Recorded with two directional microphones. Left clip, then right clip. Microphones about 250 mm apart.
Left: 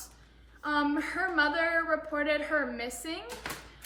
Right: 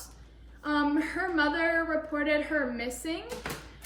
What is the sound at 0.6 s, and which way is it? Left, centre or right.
A woman's voice, centre.